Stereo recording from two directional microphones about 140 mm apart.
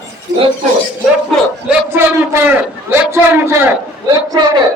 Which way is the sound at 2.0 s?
20° right (ahead or behind).